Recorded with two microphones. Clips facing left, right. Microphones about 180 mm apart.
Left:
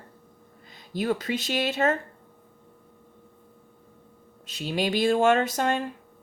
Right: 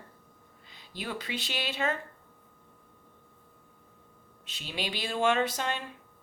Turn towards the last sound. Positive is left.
turn(degrees=45)  # may be behind; listen again after turning